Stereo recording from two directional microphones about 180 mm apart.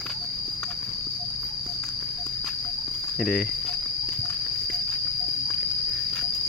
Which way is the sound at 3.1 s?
Centre (ahead or behind).